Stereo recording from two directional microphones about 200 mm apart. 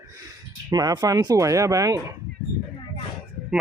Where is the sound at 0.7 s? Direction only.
20° right (ahead or behind).